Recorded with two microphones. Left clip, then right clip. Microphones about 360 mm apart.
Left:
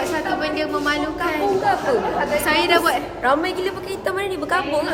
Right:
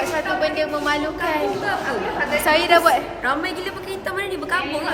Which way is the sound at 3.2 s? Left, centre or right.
Centre.